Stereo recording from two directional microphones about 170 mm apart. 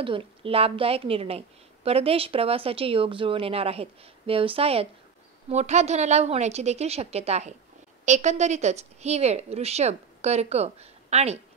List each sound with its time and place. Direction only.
0.0 s a woman's voice: 30° right (ahead or behind)